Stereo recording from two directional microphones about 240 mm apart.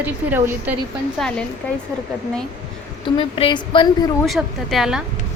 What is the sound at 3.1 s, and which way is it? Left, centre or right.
Speech, left.